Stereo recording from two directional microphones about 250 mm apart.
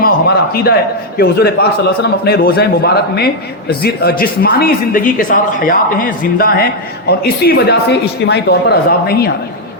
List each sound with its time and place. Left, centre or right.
0.5 s a man's voice: left